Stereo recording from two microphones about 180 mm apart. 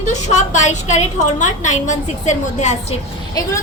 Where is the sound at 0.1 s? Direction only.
40° left (ahead or behind).